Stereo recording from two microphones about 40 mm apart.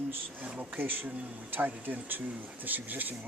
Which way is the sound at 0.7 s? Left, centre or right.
Right.